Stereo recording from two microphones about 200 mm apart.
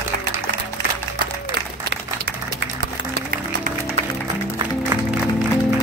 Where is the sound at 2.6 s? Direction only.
60° right (ahead or behind).